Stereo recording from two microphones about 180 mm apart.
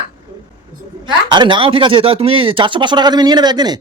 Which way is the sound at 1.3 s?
25° right (ahead or behind).